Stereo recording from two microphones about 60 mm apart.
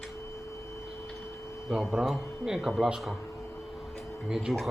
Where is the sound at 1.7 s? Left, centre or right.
Centre.